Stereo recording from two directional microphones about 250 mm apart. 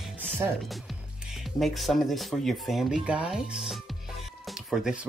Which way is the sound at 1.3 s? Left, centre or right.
Centre.